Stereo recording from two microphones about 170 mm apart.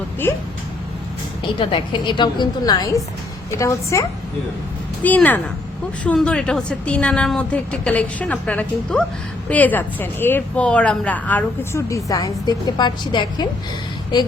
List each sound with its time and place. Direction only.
0.2 s speech: 15° left (ahead or behind)
1.5 s a woman's voice: 30° left (ahead or behind)
5.0 s speech: 10° left (ahead or behind); by 13.5 s 25° left (ahead or behind)